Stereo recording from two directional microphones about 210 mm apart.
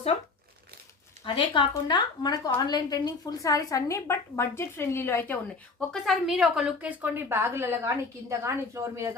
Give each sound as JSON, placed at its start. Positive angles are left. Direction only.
{"t": 1.2, "sound": "a woman's voice", "side_deg": 25}
{"t": 5.9, "sound": "a woman's voice", "side_deg": 0}